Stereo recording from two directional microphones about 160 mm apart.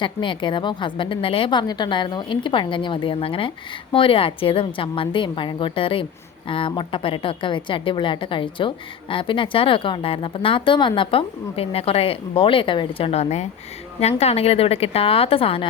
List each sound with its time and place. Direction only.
0.0 s a woman's voice: 30° left (ahead or behind)